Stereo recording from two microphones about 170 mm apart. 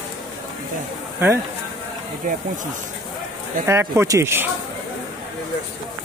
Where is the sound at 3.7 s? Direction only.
15° right (ahead or behind).